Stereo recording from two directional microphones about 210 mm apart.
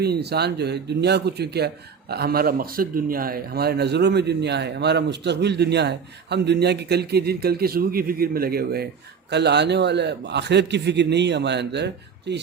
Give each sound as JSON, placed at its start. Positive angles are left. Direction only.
{"t": 0.0, "sound": "speech", "side_deg": -50}